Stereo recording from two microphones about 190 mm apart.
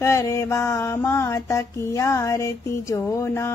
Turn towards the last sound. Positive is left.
turn(degrees=15)  # may be behind; listen again after turning